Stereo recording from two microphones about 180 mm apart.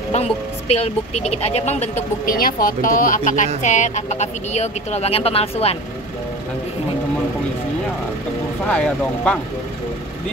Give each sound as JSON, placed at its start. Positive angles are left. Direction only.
{"t": 0.7, "sound": "speech", "side_deg": 35}
{"t": 2.2, "sound": "speech", "side_deg": 55}
{"t": 8.6, "sound": "speech", "side_deg": 5}